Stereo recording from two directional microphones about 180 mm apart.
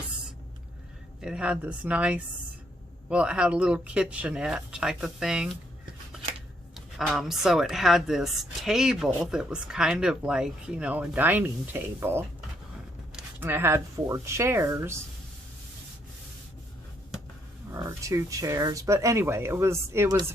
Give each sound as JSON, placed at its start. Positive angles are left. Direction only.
{"t": 1.2, "sound": "a woman's voice", "side_deg": -5}
{"t": 6.7, "sound": "a woman's voice", "side_deg": 0}
{"t": 17.7, "sound": "speech", "side_deg": -15}